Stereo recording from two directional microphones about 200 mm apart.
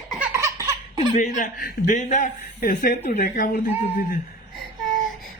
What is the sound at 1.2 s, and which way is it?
A man's voice, 45° left (ahead or behind).